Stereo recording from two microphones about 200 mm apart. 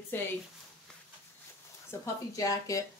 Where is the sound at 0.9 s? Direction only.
5° left (ahead or behind).